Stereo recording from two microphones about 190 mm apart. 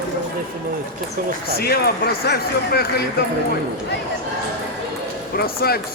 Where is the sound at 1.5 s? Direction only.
55° left (ahead or behind).